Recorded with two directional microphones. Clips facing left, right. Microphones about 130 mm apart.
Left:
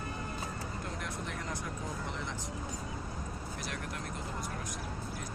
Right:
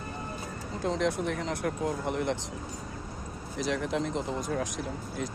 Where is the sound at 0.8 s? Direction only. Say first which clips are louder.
Right 17 dB; 90° right; by 2.4 s 60° right (ahead or behind).